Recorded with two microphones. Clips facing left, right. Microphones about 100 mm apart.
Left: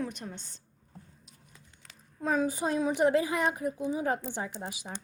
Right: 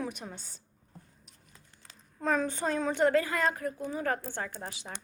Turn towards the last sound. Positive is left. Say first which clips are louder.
# left 2 dB
turn(degrees=15)  # may be behind; listen again after turning